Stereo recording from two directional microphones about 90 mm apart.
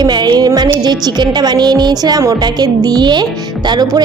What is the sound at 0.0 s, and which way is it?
A woman's voice, 55° right (ahead or behind).